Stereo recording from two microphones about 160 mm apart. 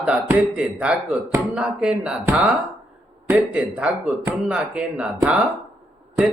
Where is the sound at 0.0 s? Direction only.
10° right (ahead or behind).